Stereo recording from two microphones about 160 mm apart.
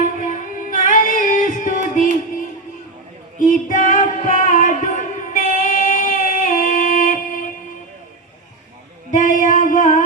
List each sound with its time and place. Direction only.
0.0 s music: 55° left (ahead or behind)
3.3 s music: 55° left (ahead or behind)
5.5 s a sound: 55° left (ahead or behind)
9.1 s music: 50° left (ahead or behind)